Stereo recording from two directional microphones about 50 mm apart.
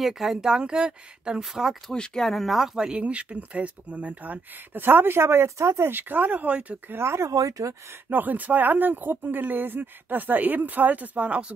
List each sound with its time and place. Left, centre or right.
0.0 s speech: centre
1.4 s speech: centre
2.0 s speech: centre
2.9 s speech: right
4.8 s speech: right
6.9 s speech: right
8.1 s speech: right